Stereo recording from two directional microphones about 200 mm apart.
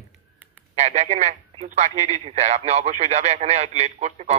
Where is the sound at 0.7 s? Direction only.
35° right (ahead or behind).